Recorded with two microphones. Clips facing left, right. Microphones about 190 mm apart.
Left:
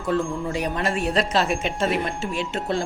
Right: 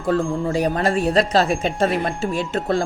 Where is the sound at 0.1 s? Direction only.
40° right (ahead or behind).